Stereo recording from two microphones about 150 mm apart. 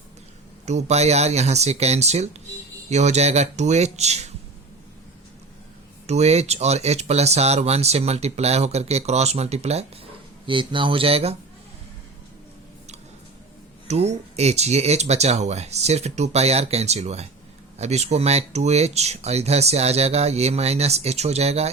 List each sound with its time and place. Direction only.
0.6 s speech: 50° right (ahead or behind)
6.1 s speech: 45° right (ahead or behind)
10.4 s speech: 35° right (ahead or behind)
13.8 s speech: 45° right (ahead or behind)